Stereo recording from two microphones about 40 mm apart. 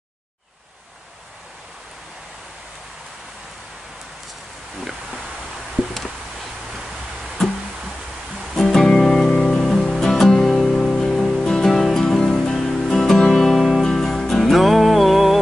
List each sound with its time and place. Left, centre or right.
8.5 s music: centre